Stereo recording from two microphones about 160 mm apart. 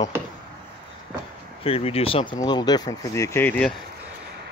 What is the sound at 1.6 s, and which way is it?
Speech, 35° left (ahead or behind).